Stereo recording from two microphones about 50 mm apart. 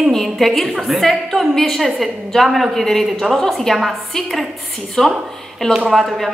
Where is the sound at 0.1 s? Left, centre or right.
Centre.